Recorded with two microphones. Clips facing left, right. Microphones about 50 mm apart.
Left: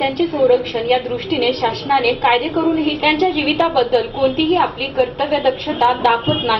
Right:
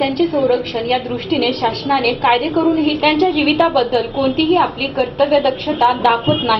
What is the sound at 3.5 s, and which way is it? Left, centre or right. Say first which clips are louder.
A woman's voice: right 1 dB; centre.